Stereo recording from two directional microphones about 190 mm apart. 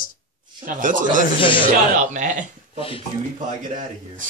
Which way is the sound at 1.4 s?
25° left (ahead or behind).